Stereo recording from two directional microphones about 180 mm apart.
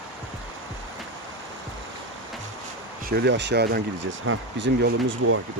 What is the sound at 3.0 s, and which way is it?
Speech, 65° right (ahead or behind).